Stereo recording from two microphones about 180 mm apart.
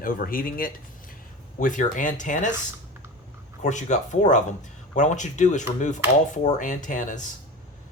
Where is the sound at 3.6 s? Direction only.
40° left (ahead or behind).